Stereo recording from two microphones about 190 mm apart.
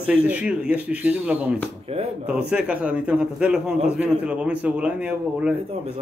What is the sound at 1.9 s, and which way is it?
Speech, 35° right (ahead or behind).